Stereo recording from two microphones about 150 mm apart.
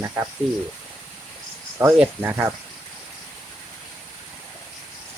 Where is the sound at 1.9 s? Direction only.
5° right (ahead or behind).